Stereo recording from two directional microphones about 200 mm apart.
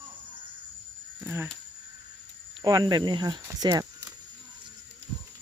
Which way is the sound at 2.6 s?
20° right (ahead or behind).